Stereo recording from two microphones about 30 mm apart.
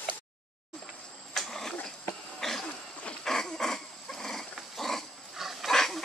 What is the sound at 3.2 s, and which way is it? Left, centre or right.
Dog, centre.